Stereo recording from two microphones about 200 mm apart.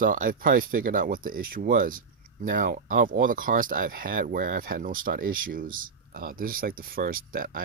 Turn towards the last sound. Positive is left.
turn(degrees=-45)  # may be behind; listen again after turning